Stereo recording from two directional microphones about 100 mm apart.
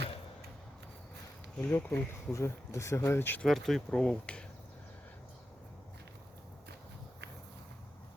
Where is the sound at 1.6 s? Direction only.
20° left (ahead or behind).